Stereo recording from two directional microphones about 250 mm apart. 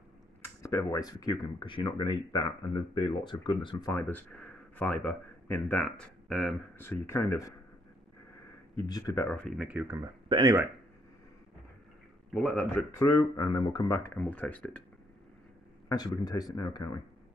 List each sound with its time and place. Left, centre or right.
0.4 s speech: centre
8.7 s speech: centre
10.2 s speech: centre
12.4 s speech: centre
15.9 s speech: centre